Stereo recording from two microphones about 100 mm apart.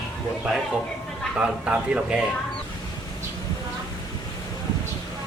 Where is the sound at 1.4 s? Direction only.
10° right (ahead or behind).